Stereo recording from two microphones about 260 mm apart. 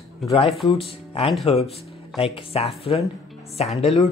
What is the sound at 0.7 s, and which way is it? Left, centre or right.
Speech, left.